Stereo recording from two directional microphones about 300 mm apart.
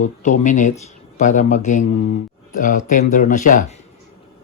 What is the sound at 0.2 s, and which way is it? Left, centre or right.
Speech, left.